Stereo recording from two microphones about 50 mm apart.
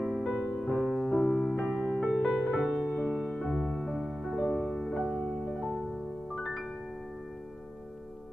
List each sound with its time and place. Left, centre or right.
0.0 s music: centre
0.7 s piano: centre
1.8 s music: centre